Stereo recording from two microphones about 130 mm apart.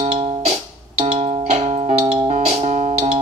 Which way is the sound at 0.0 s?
55° right (ahead or behind).